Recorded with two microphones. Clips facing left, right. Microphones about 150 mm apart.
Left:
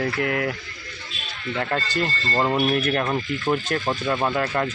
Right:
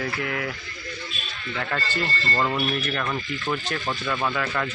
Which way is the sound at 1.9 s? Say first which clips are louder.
Left 2 dB; 15° left (ahead or behind).